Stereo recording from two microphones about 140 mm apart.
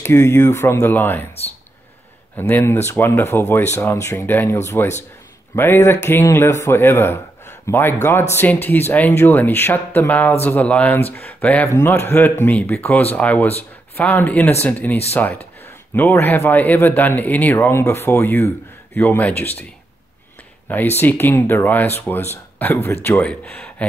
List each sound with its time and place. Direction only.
0.0 s speech: 20° left (ahead or behind)
2.3 s speech: 15° left (ahead or behind)
20.6 s speech: 15° left (ahead or behind)